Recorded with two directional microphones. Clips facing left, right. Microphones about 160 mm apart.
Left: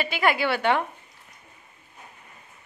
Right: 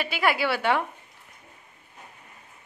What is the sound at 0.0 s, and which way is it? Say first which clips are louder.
Speech: left 1 dB; 5° right (ahead or behind).